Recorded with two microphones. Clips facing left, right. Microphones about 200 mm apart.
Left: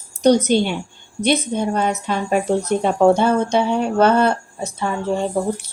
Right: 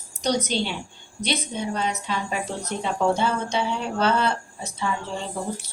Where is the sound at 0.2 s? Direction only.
55° left (ahead or behind).